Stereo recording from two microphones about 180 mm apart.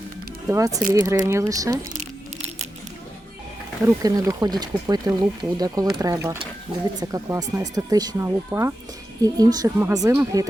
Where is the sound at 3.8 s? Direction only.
20° right (ahead or behind).